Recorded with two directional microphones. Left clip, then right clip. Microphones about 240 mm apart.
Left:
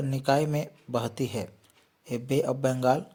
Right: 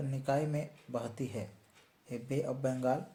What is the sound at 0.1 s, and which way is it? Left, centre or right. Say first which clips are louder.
Speech: left 8 dB; left.